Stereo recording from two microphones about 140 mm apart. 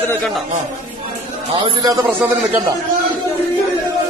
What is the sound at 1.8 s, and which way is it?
Speech, 25° right (ahead or behind).